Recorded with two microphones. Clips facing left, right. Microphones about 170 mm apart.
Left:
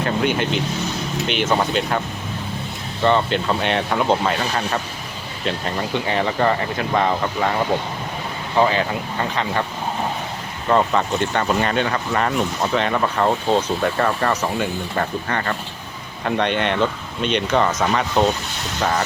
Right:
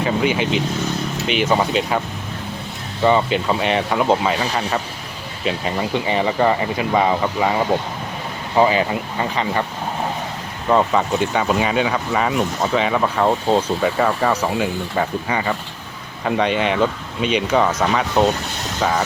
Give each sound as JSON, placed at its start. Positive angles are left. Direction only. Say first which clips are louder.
{"t": 0.0, "sound": "speech", "louder": "right 1 dB", "side_deg": 0}
{"t": 3.0, "sound": "speech", "louder": "right 2 dB", "side_deg": -5}
{"t": 8.5, "sound": "speech", "louder": "right 2 dB", "side_deg": -5}
{"t": 10.7, "sound": "speech", "louder": "right 1 dB", "side_deg": -5}